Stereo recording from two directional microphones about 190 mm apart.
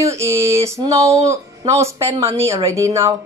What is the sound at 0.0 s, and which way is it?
Speech, 15° right (ahead or behind).